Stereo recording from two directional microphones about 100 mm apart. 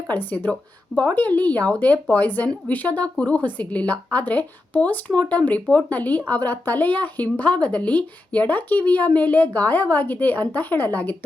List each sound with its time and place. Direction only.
0.1 s a woman's voice: 15° left (ahead or behind)